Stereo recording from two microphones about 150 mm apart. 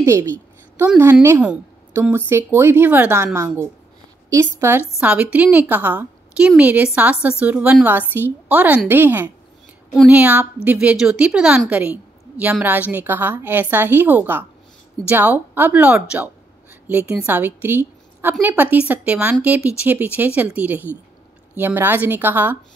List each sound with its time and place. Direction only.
0.0 s a woman's voice: 20° right (ahead or behind)